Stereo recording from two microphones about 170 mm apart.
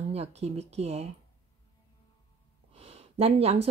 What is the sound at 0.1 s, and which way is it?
Speech, 40° right (ahead or behind).